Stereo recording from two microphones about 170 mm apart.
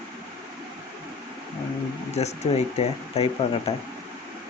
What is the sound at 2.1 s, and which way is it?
Speech, 40° left (ahead or behind).